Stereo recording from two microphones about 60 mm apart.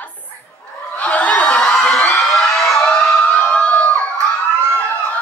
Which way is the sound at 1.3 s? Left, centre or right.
Left.